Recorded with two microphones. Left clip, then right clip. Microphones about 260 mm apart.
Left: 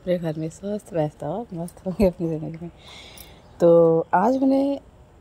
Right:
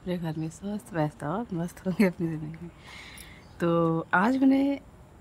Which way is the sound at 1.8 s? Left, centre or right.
Right.